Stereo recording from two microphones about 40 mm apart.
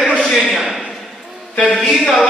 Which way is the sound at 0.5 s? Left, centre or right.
Centre.